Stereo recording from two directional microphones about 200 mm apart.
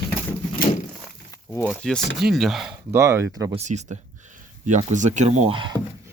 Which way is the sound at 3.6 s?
35° right (ahead or behind).